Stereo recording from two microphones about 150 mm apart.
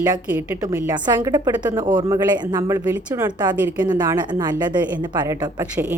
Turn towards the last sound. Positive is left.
turn(degrees=-30)  # may be behind; listen again after turning